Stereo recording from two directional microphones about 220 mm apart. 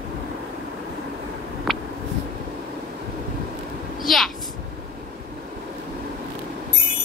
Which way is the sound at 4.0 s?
Centre (ahead or behind).